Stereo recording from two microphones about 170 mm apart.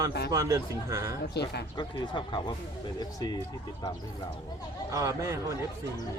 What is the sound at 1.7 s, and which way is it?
Speech, 25° left (ahead or behind).